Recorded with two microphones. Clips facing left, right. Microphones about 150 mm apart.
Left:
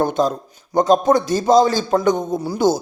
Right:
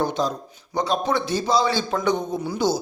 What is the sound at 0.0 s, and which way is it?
A man's voice, 50° left (ahead or behind).